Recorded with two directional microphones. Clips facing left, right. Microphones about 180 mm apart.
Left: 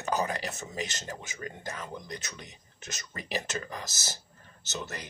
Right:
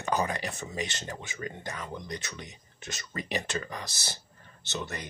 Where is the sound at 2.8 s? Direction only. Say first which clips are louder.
Right 4 dB; 40° left (ahead or behind).